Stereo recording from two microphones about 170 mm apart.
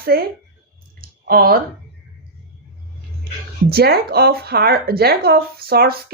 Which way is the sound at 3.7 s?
65° right (ahead or behind).